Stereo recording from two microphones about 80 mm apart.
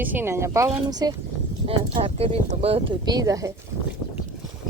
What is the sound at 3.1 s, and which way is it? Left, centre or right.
Speech, right.